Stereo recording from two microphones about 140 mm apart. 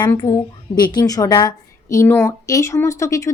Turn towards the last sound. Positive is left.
turn(degrees=20)  # may be behind; listen again after turning